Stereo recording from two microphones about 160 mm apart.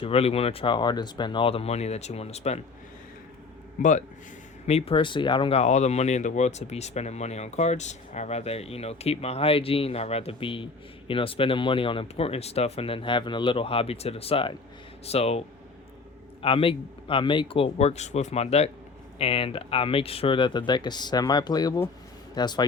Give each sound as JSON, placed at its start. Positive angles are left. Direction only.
{"t": 0.0, "sound": "speech", "side_deg": 40}
{"t": 3.8, "sound": "speech", "side_deg": 50}
{"t": 4.6, "sound": "speech", "side_deg": 40}